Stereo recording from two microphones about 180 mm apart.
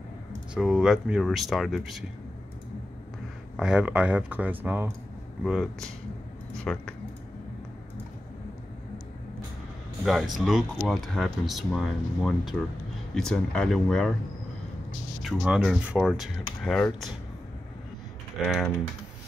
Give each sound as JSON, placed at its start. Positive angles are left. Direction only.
{"t": 0.6, "sound": "speech", "side_deg": -5}
{"t": 3.5, "sound": "speech", "side_deg": -5}
{"t": 10.0, "sound": "speech", "side_deg": 0}
{"t": 15.2, "sound": "speech", "side_deg": 0}
{"t": 18.4, "sound": "speech", "side_deg": 0}